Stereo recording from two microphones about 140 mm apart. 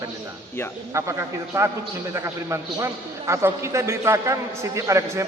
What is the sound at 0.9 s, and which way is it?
A man's voice, 20° right (ahead or behind).